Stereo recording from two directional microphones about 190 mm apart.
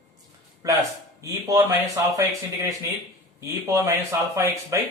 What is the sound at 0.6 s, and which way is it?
Speech, 20° right (ahead or behind).